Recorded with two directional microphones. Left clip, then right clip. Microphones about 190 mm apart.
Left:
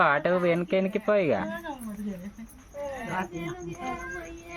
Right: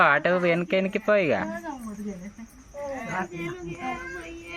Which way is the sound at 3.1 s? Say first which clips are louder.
Right 1 dB; 65° left (ahead or behind).